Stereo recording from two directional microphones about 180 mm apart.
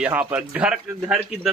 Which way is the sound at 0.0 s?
10° right (ahead or behind).